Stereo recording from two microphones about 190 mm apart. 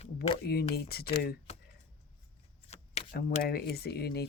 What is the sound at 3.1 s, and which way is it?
Speech, 55° left (ahead or behind).